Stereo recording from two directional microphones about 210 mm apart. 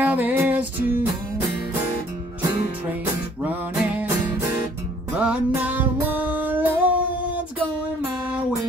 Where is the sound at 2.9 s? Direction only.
10° right (ahead or behind).